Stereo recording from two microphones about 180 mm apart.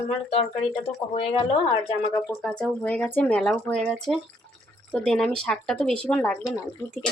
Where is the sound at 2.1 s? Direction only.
10° left (ahead or behind).